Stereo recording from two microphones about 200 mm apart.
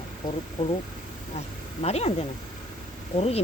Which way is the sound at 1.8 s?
30° left (ahead or behind).